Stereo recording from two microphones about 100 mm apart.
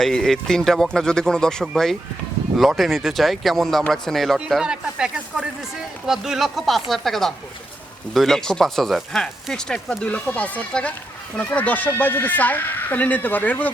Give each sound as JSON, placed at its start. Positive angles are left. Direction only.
{"t": 0.0, "sound": "speech", "side_deg": 5}